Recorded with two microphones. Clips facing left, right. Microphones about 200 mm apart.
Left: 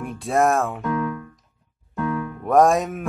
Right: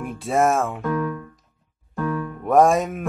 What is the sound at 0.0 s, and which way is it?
Speech, centre (ahead or behind).